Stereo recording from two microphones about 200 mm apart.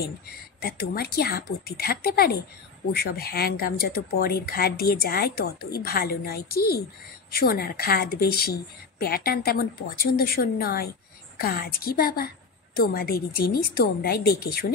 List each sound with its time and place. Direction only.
0.6 s speech: 50° left (ahead or behind)